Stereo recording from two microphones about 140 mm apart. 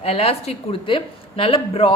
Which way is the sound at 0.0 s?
45° left (ahead or behind).